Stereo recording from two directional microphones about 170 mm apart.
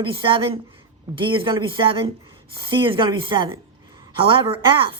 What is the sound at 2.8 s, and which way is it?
A woman's voice, 30° right (ahead or behind).